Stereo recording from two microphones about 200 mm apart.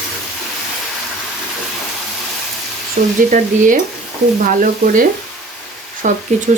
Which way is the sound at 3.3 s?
40° right (ahead or behind).